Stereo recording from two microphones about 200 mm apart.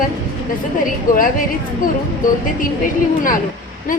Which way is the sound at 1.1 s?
45° left (ahead or behind).